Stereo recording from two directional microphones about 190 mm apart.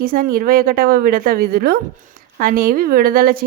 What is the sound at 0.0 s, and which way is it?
Speech, 50° right (ahead or behind).